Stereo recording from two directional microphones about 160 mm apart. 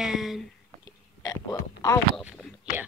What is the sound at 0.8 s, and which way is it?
Burping, 25° left (ahead or behind).